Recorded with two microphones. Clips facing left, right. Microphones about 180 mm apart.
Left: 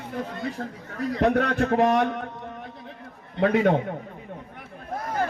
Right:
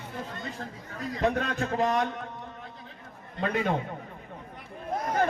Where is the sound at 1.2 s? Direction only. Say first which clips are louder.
Left 6 dB; 70° left (ahead or behind).